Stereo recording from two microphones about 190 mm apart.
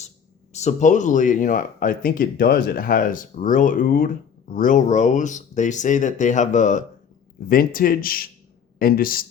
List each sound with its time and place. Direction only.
0.5 s speech: 40° left (ahead or behind)